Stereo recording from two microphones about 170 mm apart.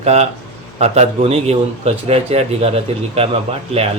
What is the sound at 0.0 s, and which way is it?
A man's voice, 40° right (ahead or behind).